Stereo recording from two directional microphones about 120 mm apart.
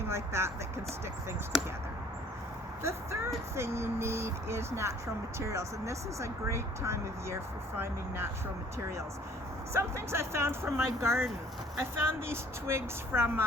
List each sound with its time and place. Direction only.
0.1 s speech: 20° right (ahead or behind)
2.8 s speech: 25° right (ahead or behind)
9.7 s speech: 20° right (ahead or behind)